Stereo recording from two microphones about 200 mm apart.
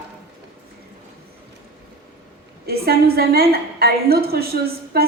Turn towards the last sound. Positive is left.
turn(degrees=-50)  # may be behind; listen again after turning